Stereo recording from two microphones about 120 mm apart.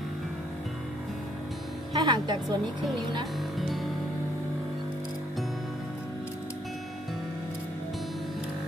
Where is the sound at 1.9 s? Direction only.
35° right (ahead or behind).